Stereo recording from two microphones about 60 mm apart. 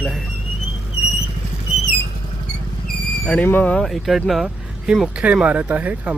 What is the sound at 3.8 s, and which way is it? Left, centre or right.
Speech, centre.